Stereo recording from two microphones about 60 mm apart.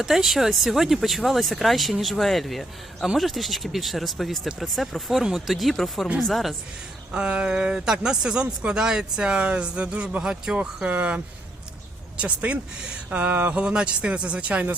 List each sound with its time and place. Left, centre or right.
0.0 s speech: centre
7.1 s speech: centre
10.9 s a sound: right
12.1 s speech: right
13.1 s a sound: right
13.6 s speech: centre